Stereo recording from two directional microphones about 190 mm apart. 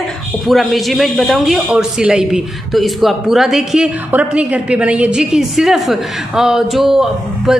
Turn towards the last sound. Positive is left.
turn(degrees=0)  # may be behind; listen again after turning